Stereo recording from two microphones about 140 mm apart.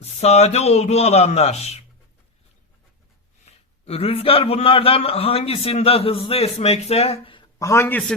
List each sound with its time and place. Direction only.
0.0 s a man's voice: 50° left (ahead or behind)
3.4 s a man's voice: 45° left (ahead or behind)
7.6 s a man's voice: 20° left (ahead or behind)